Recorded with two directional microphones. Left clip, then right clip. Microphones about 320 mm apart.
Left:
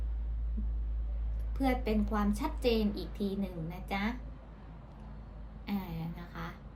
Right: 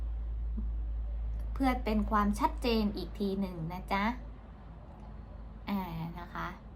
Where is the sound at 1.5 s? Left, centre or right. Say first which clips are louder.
Even; centre.